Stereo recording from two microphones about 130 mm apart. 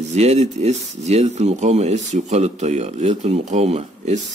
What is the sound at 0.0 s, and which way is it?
Speech, 60° right (ahead or behind).